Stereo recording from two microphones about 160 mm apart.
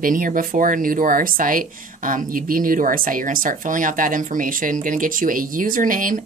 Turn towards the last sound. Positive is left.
turn(degrees=-55)  # may be behind; listen again after turning